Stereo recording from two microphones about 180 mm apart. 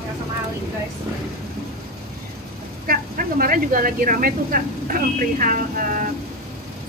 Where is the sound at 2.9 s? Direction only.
50° right (ahead or behind).